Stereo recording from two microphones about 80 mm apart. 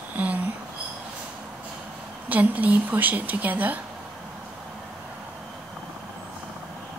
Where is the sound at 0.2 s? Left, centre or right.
Centre.